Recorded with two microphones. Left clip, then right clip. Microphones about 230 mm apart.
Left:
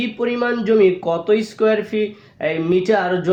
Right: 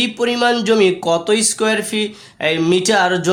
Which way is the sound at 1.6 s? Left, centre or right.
Right.